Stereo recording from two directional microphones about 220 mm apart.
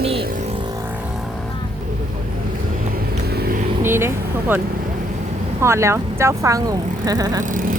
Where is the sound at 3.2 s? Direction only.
45° right (ahead or behind).